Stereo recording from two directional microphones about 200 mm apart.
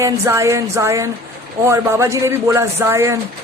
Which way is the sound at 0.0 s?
15° right (ahead or behind).